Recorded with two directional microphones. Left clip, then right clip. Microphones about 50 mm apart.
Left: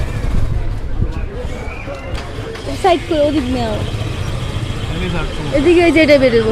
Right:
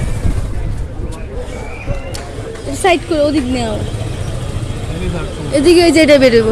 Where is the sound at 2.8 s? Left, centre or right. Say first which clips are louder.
Right 1 dB; right.